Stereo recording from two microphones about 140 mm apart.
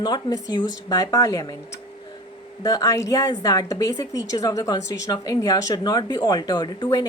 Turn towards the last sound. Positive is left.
turn(degrees=30)  # may be behind; listen again after turning